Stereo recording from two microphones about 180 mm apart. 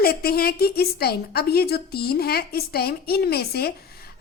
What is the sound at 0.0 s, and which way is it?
A woman's voice, 60° left (ahead or behind).